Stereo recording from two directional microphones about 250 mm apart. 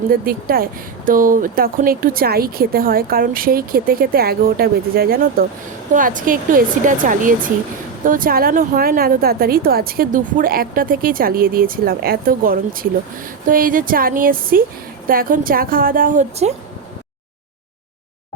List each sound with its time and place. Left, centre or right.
0.1 s speech: right